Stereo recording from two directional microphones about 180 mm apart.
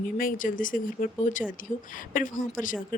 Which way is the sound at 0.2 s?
50° left (ahead or behind).